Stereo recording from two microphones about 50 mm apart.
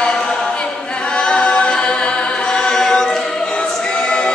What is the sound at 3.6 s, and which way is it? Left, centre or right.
Choir, left.